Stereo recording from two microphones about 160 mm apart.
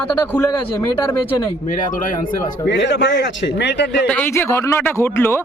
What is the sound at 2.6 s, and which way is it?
A man's voice, 90° left.